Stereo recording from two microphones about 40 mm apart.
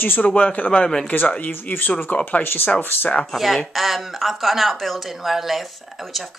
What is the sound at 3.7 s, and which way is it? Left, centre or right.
Speech, centre.